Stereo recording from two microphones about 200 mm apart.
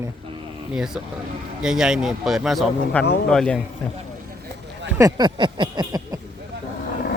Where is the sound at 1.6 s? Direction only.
5° right (ahead or behind).